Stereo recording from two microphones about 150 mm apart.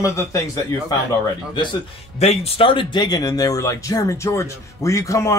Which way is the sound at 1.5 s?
30° left (ahead or behind).